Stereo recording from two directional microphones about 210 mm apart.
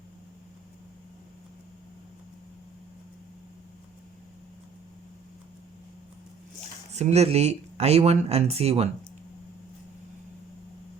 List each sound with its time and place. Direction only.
6.9 s speech: 30° right (ahead or behind)